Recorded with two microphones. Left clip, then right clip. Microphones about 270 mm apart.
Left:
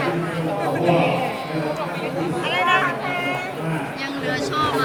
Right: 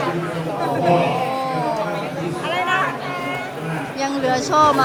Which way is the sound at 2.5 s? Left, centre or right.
Right.